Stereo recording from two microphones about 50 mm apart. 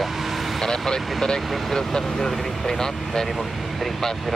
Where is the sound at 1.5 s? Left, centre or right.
Centre.